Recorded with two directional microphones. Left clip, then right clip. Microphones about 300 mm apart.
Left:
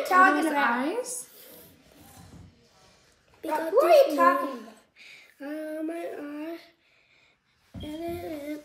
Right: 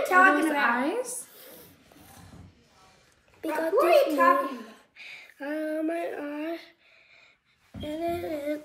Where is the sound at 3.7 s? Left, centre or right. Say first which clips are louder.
Left 2 dB; left.